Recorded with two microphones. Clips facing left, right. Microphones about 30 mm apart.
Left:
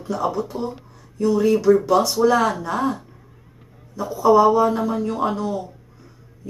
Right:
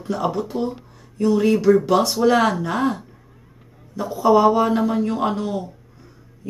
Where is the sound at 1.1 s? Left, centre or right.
Right.